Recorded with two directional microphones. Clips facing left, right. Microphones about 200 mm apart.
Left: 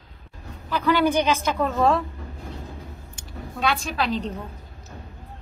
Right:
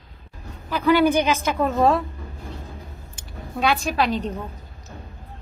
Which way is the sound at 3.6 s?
10° right (ahead or behind).